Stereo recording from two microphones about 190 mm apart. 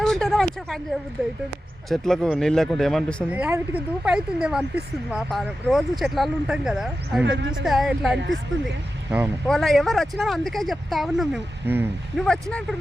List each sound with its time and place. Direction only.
0.0 s a sound: centre (ahead or behind)
1.9 s speech: centre (ahead or behind)
3.2 s speech: 5° right (ahead or behind)
7.3 s speech: 70° right (ahead or behind)
7.6 s speech: centre (ahead or behind)
11.6 s speech: 10° right (ahead or behind)
12.1 s speech: 5° left (ahead or behind)